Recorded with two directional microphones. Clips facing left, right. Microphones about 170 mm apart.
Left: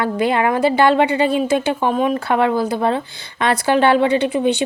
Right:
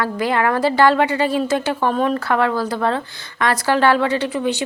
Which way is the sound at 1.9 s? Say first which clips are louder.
Left 1 dB; 5° left (ahead or behind).